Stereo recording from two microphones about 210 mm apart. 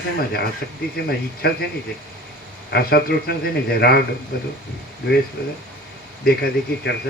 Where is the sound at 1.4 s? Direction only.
50° left (ahead or behind).